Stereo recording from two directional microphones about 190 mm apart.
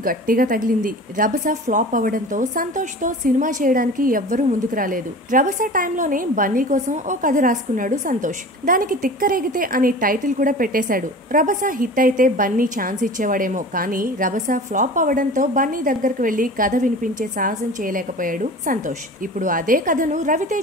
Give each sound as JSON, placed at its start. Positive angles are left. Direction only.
{"t": 0.0, "sound": "speech", "side_deg": -50}